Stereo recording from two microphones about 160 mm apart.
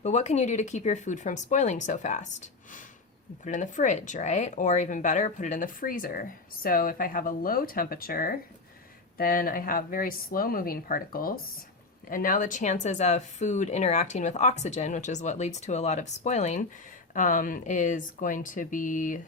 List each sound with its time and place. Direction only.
0.0 s speech: 45° left (ahead or behind)